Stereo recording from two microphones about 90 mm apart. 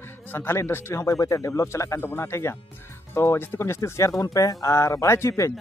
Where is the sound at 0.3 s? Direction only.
25° left (ahead or behind).